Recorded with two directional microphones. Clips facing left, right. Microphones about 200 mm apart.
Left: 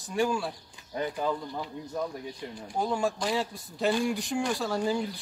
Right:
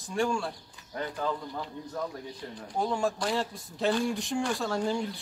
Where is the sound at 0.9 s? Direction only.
15° left (ahead or behind).